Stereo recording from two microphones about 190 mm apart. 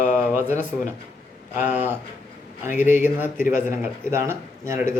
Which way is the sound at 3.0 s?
10° right (ahead or behind).